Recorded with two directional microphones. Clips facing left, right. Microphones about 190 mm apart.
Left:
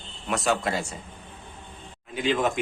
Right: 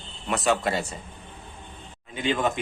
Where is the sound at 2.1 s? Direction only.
Centre (ahead or behind).